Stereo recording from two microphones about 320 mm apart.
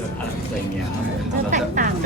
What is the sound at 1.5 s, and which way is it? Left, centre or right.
Speech, right.